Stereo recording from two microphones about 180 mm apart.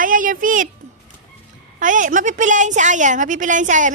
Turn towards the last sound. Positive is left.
turn(degrees=-45)  # may be behind; listen again after turning